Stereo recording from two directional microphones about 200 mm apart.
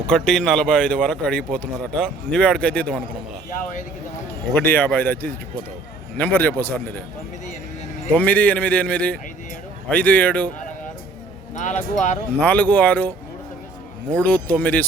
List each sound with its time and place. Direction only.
0.1 s speech: centre (ahead or behind)
4.5 s a man's voice: 10° left (ahead or behind)
8.1 s a man's voice: 10° left (ahead or behind)
11.5 s speech: 40° left (ahead or behind)
12.4 s a man's voice: 10° left (ahead or behind)
14.2 s a man's voice: 10° left (ahead or behind)